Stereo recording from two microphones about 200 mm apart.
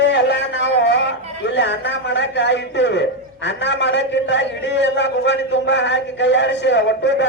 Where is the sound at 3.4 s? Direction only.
60° left (ahead or behind).